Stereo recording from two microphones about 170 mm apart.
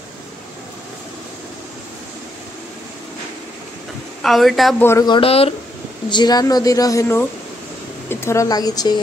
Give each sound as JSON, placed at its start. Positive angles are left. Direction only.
{"t": 4.2, "sound": "a woman's voice", "side_deg": 0}
{"t": 4.8, "sound": "a woman's voice", "side_deg": 20}